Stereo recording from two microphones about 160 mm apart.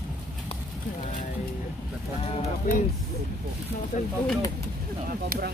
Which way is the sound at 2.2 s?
40° left (ahead or behind).